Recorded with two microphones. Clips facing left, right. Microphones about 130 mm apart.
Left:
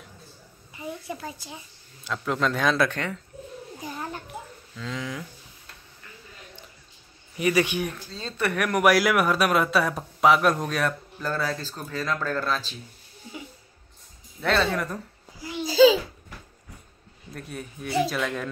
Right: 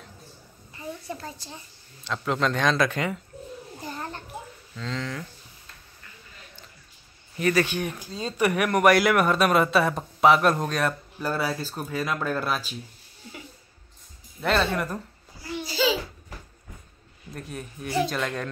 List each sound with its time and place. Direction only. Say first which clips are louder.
0.7 s a child's voice: left 1 dB; 5° left (ahead or behind)
3.7 s a sound: left 1 dB; 5° left (ahead or behind)
4.7 s speech: right 1 dB; 10° left (ahead or behind)
7.3 s speech: even; 15° left (ahead or behind)
7.9 s speech: right 4 dB; 15° right (ahead or behind)
11.1 s speech: right 2 dB; 10° right (ahead or behind)
14.4 s speech: even; centre (ahead or behind)
17.3 s speech: even; centre (ahead or behind)